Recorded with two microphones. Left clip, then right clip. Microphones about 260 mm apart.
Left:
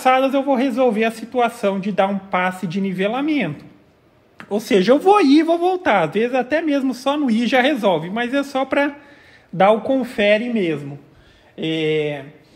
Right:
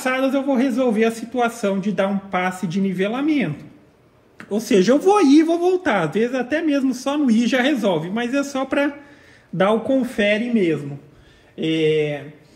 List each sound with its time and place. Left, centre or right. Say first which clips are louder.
0.0 s speech: left 5 dB; left